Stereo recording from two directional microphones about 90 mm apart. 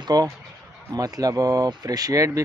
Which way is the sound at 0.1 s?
50° right (ahead or behind).